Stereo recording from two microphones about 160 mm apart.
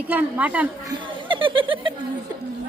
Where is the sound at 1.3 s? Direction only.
30° right (ahead or behind).